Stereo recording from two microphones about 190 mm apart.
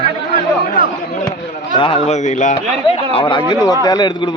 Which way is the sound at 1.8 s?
30° left (ahead or behind).